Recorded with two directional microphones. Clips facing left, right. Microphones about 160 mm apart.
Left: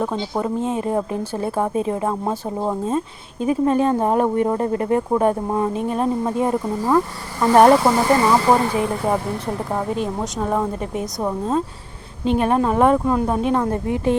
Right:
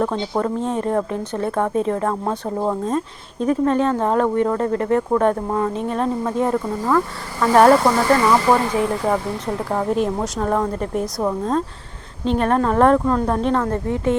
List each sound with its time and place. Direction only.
0.0 s speech: 5° left (ahead or behind)
7.7 s a woman's voice: 5° left (ahead or behind)
7.9 s speech: 15° left (ahead or behind)
9.7 s a woman's voice: centre (ahead or behind); by 14.2 s 15° left (ahead or behind)